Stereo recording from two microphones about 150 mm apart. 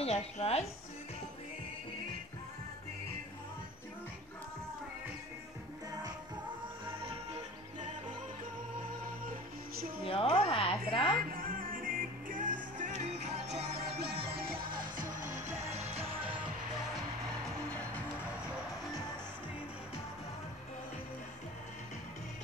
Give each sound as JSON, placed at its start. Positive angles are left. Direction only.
{"t": 0.0, "sound": "speech", "side_deg": 45}
{"t": 10.0, "sound": "speech", "side_deg": 40}
{"t": 11.3, "sound": "music", "side_deg": -70}
{"t": 13.9, "sound": "music", "side_deg": -90}
{"t": 15.0, "sound": "music", "side_deg": -60}